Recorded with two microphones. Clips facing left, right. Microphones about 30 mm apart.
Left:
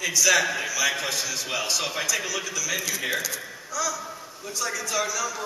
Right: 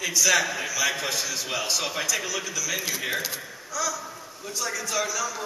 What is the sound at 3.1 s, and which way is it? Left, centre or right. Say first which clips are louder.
Speech: left 2 dB; centre.